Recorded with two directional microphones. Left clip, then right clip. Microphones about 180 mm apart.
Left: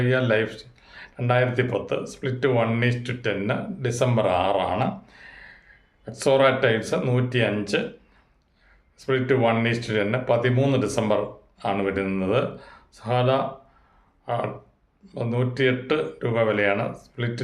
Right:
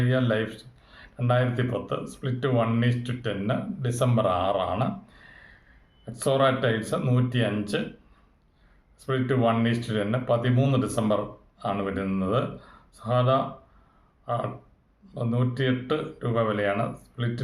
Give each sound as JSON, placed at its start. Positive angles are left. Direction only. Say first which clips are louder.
{"t": 0.0, "sound": "speech", "louder": "left 4 dB", "side_deg": 15}
{"t": 9.0, "sound": "speech", "louder": "left 4 dB", "side_deg": 15}